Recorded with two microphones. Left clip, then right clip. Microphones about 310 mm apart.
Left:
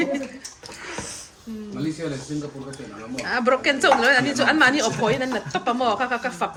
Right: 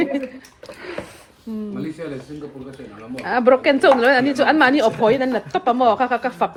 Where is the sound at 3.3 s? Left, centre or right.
Centre.